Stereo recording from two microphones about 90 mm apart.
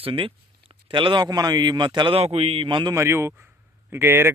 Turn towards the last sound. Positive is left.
turn(degrees=-25)  # may be behind; listen again after turning